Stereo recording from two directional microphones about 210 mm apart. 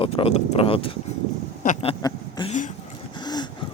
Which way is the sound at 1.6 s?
35° left (ahead or behind).